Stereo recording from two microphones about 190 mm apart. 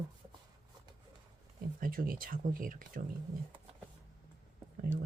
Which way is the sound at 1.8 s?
50° right (ahead or behind).